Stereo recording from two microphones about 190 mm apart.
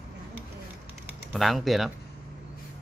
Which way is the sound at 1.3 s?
Centre (ahead or behind).